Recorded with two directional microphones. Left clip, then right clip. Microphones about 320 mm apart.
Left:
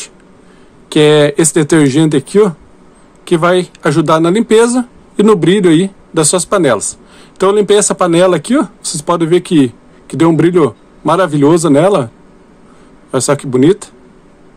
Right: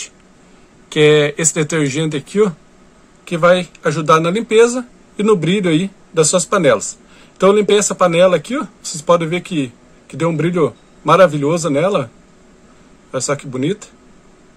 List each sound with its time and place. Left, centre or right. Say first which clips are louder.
0.8 s speech: left 4 dB; left
13.1 s speech: left 8 dB; left